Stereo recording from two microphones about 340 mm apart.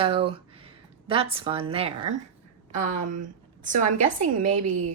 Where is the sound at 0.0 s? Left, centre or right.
Centre.